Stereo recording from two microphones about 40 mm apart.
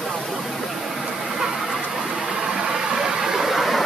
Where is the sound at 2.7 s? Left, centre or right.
Centre.